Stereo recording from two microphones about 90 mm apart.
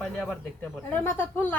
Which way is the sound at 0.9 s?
20° left (ahead or behind).